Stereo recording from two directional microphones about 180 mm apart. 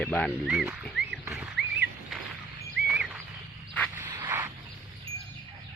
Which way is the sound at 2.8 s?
10° right (ahead or behind).